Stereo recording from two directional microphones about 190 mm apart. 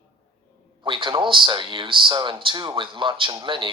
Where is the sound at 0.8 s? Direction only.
25° right (ahead or behind).